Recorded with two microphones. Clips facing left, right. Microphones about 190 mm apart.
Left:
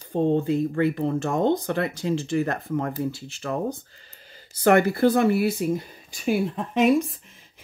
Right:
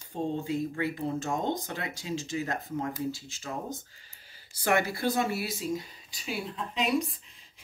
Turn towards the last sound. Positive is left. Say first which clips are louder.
# left 10 dB
turn(degrees=55)  # may be behind; listen again after turning